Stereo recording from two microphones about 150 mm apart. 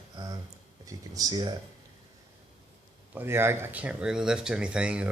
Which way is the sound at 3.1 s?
15° right (ahead or behind).